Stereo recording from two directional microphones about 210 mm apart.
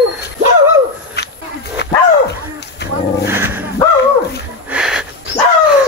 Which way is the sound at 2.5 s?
55° left (ahead or behind).